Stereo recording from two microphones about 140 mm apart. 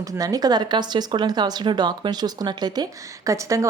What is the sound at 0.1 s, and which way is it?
A woman's voice, 25° right (ahead or behind).